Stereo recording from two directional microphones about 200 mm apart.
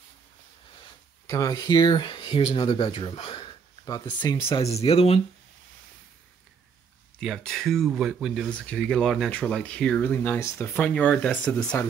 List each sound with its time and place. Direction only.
1.2 s speech: 15° left (ahead or behind)
7.2 s speech: centre (ahead or behind)